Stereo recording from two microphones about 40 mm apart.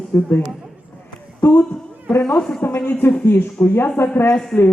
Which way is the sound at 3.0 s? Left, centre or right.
Left.